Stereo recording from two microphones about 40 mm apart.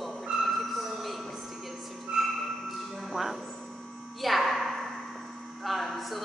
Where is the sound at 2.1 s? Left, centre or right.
Centre.